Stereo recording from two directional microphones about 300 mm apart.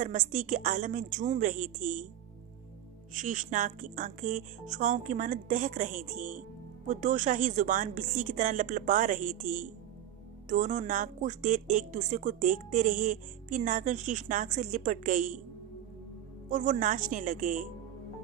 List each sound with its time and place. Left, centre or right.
0.0 s a woman's voice: right
3.2 s a woman's voice: right
16.4 s a woman's voice: right